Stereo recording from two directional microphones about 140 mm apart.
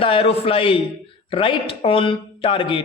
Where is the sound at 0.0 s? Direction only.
40° left (ahead or behind).